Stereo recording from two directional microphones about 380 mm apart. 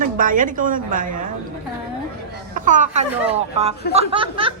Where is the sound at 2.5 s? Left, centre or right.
Centre.